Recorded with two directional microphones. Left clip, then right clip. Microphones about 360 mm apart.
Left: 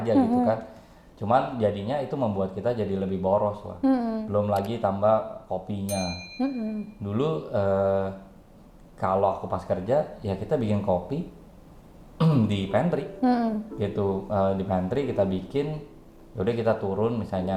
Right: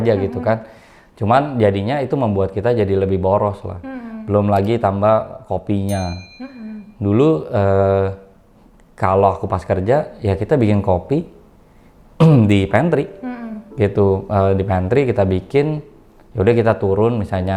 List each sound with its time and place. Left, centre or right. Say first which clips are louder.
0.0 s speech: right 5 dB; right
6.0 s speech: right 5 dB; centre
7.0 s speech: right 13 dB; right
13.2 s a sound: left 6 dB; left
13.7 s speech: right 14 dB; right